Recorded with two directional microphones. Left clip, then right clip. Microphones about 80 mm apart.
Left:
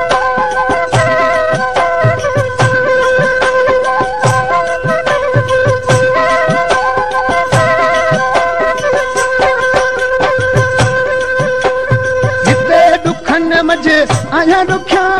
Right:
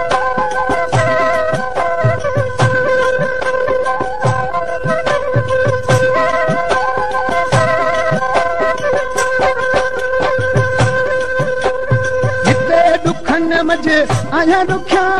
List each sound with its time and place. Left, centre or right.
0.9 s music: left
2.6 s music: left
5.5 s music: left
12.4 s music: left